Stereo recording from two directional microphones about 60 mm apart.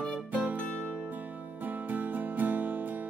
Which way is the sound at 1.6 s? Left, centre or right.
Right.